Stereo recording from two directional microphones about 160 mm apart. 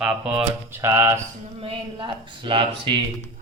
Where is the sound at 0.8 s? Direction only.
20° right (ahead or behind).